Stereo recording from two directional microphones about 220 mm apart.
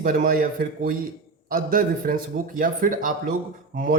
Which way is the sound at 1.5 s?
40° right (ahead or behind).